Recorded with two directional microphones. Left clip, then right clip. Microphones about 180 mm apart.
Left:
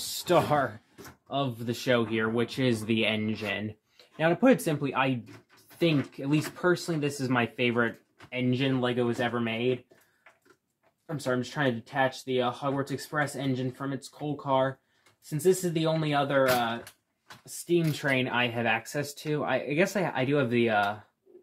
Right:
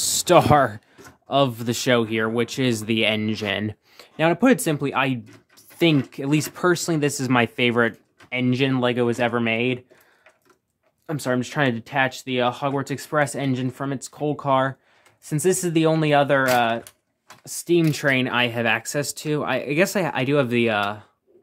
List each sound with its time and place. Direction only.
0.1 s speech: 45° right (ahead or behind)
11.1 s speech: 60° right (ahead or behind)